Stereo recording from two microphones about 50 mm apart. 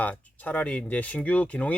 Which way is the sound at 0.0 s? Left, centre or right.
Left.